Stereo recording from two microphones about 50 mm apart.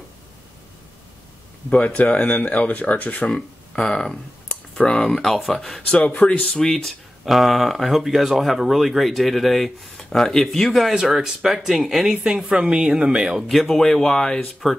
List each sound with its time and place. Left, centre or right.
2.0 s speech: left
3.3 s speech: centre
4.5 s clicking: centre
5.1 s speech: centre
5.8 s speech: left
6.5 s speech: centre
10.8 s a woman's voice: centre
12.1 s a woman's voice: centre
13.5 s speech: centre